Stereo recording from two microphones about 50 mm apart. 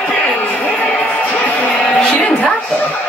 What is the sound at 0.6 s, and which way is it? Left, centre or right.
Music, left.